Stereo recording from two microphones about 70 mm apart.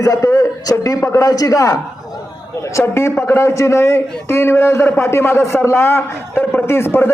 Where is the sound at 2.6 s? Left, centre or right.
Left.